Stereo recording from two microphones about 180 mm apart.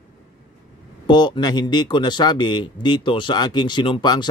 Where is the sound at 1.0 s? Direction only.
25° left (ahead or behind).